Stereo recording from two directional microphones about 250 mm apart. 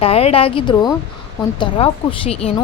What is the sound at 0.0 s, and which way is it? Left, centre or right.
Speech, left.